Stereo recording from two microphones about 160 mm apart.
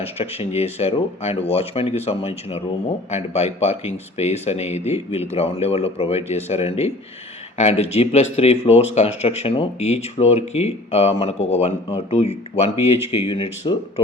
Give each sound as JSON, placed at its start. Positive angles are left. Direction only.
{"t": 0.0, "sound": "speech", "side_deg": 40}